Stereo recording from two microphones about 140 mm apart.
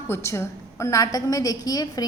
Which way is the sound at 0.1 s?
20° left (ahead or behind).